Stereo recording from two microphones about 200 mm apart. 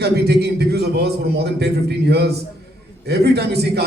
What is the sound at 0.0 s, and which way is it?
A man's voice, 55° right (ahead or behind).